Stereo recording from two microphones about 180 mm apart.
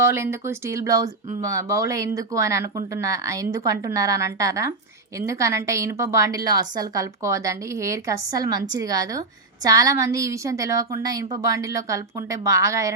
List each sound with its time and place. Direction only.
0.0 s a woman's voice: 15° right (ahead or behind)